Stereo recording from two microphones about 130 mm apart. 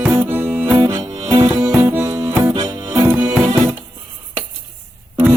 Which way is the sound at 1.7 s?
20° right (ahead or behind).